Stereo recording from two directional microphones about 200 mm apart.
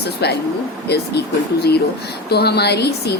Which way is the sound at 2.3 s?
55° left (ahead or behind).